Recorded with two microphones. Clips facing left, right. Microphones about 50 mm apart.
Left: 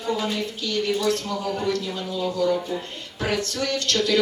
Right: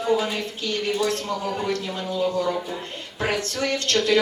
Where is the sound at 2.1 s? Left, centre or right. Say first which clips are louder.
Even; right.